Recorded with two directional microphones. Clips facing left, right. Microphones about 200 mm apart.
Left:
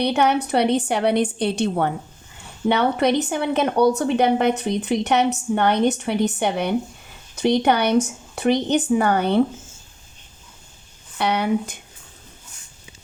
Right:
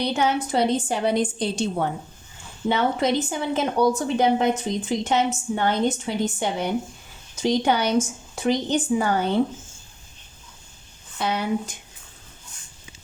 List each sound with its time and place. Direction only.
0.0 s a woman's voice: 65° left (ahead or behind)
11.2 s a woman's voice: 65° left (ahead or behind)